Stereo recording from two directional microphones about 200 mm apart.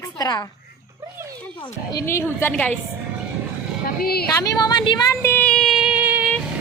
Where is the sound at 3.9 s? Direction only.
50° left (ahead or behind).